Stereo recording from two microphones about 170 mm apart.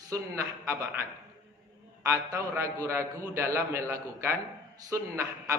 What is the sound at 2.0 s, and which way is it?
A man's voice, 15° right (ahead or behind).